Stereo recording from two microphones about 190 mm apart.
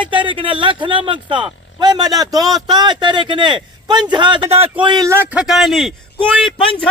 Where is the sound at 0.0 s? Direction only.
25° right (ahead or behind).